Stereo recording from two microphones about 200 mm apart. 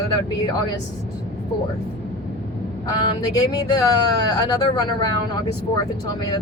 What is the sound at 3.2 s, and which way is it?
Speech, 20° left (ahead or behind).